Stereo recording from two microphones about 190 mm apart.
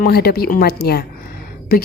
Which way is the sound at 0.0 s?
55° left (ahead or behind).